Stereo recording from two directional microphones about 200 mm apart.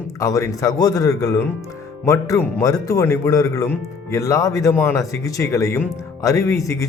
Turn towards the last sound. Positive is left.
turn(degrees=15)  # may be behind; listen again after turning